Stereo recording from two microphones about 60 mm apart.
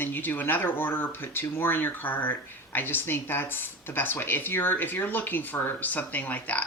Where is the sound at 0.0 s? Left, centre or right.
Left.